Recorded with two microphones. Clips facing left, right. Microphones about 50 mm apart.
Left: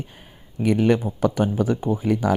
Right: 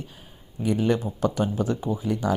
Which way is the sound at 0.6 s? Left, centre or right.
Left.